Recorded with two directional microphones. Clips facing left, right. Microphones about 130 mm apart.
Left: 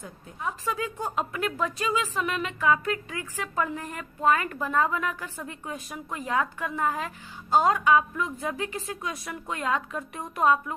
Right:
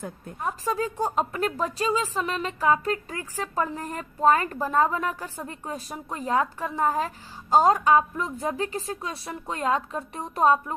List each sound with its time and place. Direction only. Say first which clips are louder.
0.0 s speech: right 3 dB; 50° right (ahead or behind); by 10.8 s 35° right (ahead or behind)